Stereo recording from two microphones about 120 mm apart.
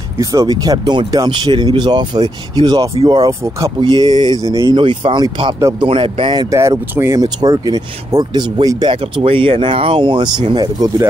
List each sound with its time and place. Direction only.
0.2 s speech: 30° right (ahead or behind); by 6.4 s 45° right (ahead or behind)
6.5 s speech: 25° right (ahead or behind)